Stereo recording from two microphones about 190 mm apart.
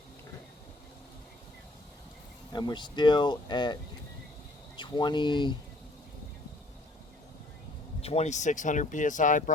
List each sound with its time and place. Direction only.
2.5 s speech: 20° left (ahead or behind)
4.8 s speech: 25° left (ahead or behind)
8.0 s speech: 35° left (ahead or behind)